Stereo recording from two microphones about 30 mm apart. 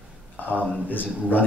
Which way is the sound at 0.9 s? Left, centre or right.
Left.